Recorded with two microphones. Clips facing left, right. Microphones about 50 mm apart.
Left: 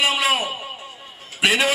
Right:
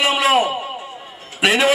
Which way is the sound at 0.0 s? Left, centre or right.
Centre.